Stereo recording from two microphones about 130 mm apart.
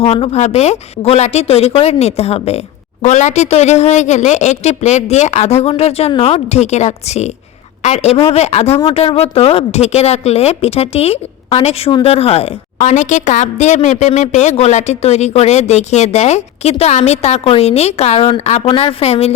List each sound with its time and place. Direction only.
0.0 s a woman's voice: 50° left (ahead or behind)
3.0 s a woman's voice: 65° left (ahead or behind)
8.8 s a woman's voice: 40° left (ahead or behind)